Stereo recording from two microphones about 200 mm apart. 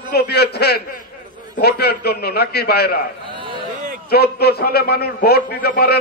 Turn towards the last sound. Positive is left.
turn(degrees=50)  # may be behind; listen again after turning